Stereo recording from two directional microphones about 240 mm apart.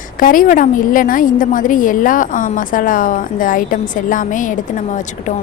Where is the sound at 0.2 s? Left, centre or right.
Left.